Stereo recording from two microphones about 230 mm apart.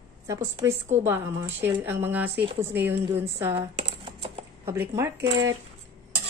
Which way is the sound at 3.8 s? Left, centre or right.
Right.